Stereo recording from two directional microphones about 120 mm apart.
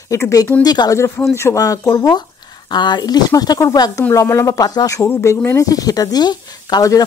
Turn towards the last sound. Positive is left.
turn(degrees=30)  # may be behind; listen again after turning